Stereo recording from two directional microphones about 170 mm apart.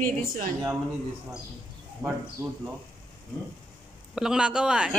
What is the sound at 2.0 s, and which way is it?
Speech, 25° right (ahead or behind).